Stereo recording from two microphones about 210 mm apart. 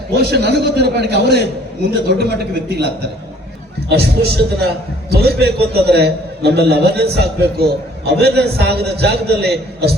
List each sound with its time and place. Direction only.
0.2 s a man's voice: 50° right (ahead or behind)